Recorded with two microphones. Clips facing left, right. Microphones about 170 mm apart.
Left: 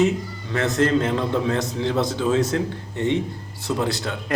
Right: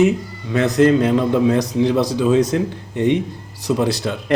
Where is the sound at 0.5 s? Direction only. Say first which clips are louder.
Right 6 dB; 20° right (ahead or behind).